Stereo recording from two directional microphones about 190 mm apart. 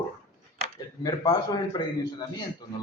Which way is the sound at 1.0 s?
20° left (ahead or behind).